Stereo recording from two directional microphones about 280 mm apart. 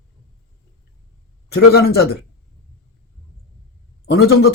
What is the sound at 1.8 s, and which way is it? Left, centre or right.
Speech, left.